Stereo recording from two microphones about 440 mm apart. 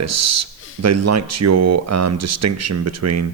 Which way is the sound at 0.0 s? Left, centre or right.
Right.